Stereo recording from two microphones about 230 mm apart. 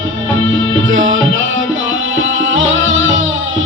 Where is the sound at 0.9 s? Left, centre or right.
Right.